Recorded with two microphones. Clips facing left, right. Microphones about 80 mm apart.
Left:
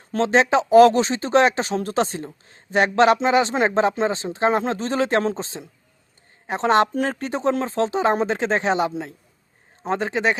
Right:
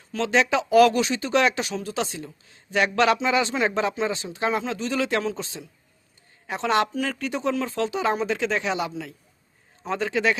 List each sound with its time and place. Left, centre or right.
0.1 s speech: left